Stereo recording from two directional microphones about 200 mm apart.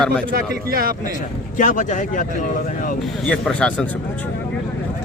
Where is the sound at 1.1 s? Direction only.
40° left (ahead or behind).